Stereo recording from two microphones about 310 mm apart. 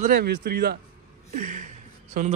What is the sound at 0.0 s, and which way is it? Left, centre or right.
A man's voice, right.